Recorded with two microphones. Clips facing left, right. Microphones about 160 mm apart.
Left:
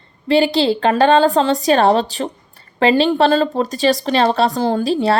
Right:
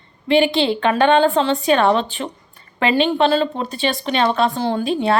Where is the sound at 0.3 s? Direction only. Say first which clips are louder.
Left 2 dB; 35° left (ahead or behind).